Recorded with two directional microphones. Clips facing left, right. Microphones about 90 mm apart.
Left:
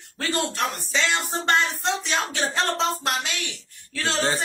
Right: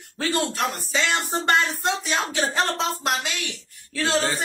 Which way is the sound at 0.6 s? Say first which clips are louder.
Right 1 dB; 5° right (ahead or behind).